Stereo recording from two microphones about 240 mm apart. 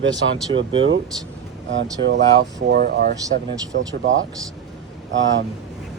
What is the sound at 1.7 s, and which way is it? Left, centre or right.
Speech, right.